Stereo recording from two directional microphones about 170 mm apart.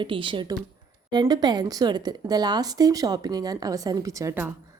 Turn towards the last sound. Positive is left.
turn(degrees=-15)  # may be behind; listen again after turning